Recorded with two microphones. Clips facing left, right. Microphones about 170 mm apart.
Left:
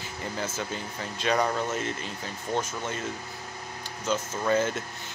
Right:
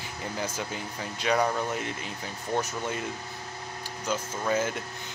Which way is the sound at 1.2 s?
10° right (ahead or behind).